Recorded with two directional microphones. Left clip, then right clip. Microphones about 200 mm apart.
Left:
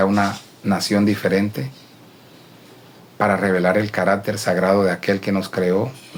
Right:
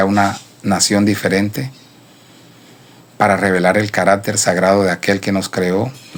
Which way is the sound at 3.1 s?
45° right (ahead or behind).